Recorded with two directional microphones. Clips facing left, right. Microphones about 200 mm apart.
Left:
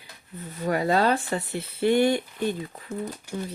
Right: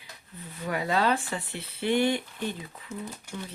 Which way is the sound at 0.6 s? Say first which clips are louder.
Left 4 dB; 40° left (ahead or behind).